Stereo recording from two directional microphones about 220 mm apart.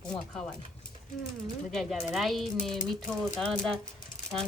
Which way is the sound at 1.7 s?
Centre (ahead or behind).